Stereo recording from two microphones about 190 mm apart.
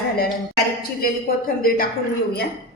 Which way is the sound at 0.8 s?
50° left (ahead or behind).